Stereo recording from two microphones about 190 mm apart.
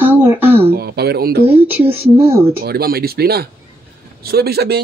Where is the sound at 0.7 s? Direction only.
55° right (ahead or behind).